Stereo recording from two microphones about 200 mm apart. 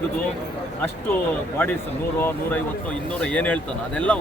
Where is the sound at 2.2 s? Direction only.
10° left (ahead or behind).